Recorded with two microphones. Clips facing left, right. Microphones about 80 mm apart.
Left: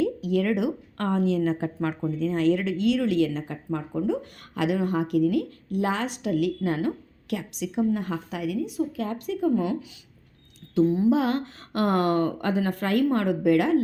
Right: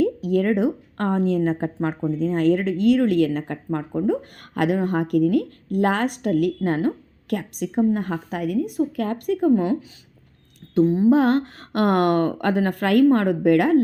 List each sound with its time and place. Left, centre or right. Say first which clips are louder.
0.0 s a woman's voice: right 4 dB; right
10.8 s speech: right 3 dB; right
11.1 s speech: right 6 dB; right